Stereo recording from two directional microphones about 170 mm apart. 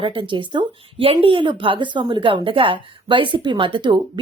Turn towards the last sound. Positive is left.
turn(degrees=-30)  # may be behind; listen again after turning